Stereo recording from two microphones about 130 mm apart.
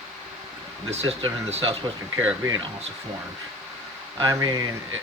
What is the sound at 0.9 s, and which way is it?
Speech, 55° right (ahead or behind).